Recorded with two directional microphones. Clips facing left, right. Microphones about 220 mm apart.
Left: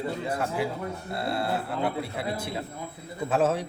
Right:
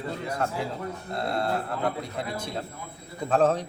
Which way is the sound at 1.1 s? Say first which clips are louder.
Right 1 dB; 5° left (ahead or behind).